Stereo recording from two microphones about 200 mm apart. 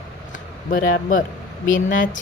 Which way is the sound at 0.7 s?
45° left (ahead or behind).